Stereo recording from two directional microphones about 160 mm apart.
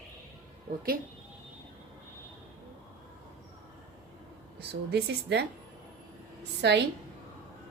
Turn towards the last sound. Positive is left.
turn(degrees=-90)